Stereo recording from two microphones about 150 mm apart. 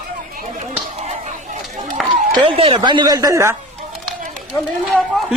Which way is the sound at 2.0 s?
Centre (ahead or behind).